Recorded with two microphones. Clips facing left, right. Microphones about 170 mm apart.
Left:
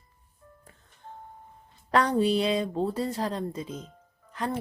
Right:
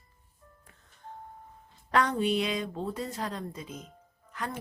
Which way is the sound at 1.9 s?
35° left (ahead or behind).